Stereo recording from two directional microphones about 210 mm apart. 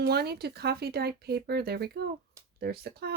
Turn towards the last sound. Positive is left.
turn(degrees=-50)  # may be behind; listen again after turning